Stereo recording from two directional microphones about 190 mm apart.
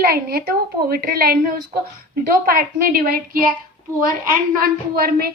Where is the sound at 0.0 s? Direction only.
55° right (ahead or behind).